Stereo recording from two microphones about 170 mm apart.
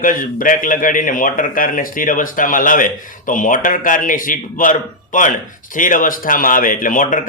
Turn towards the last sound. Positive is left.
turn(degrees=50)  # may be behind; listen again after turning